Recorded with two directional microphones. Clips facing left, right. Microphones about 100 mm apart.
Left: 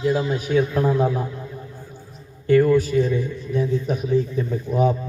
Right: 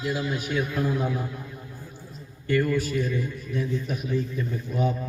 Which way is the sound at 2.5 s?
40° left (ahead or behind).